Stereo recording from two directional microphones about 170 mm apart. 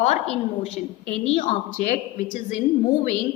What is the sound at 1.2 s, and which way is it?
A woman's voice, 40° left (ahead or behind).